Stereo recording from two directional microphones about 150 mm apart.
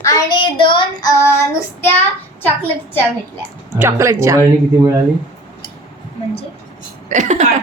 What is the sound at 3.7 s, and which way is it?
Speech, 15° right (ahead or behind).